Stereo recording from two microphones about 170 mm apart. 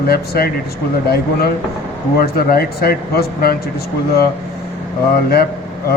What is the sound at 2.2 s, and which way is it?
Speech, 65° left (ahead or behind).